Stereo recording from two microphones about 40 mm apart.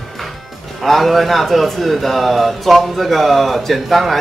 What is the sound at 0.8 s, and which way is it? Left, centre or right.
Speech, centre.